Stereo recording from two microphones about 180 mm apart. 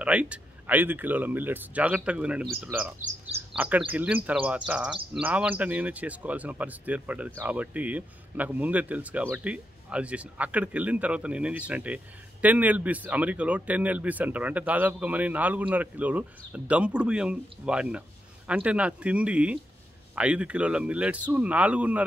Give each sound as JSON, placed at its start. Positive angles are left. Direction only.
{"t": 0.0, "sound": "speech", "side_deg": -5}
{"t": 3.0, "sound": "speech", "side_deg": -40}
{"t": 3.5, "sound": "speech", "side_deg": -10}